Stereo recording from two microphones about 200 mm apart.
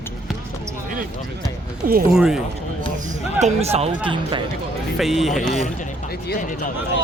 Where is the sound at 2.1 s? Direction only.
5° right (ahead or behind).